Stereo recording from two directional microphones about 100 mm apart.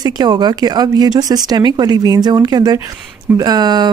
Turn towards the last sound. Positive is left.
turn(degrees=-45)  # may be behind; listen again after turning